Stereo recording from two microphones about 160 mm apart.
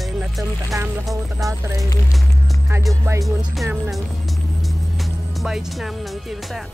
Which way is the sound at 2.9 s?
20° right (ahead or behind).